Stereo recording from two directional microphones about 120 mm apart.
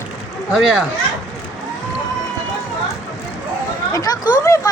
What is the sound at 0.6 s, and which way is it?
Speech, centre (ahead or behind).